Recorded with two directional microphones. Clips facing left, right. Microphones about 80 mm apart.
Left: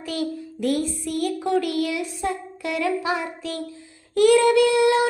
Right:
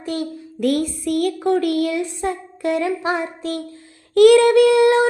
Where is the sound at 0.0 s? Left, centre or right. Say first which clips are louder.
Right 2 dB; right.